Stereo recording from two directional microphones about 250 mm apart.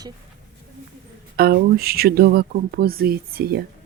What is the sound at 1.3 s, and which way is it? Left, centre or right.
Speech, right.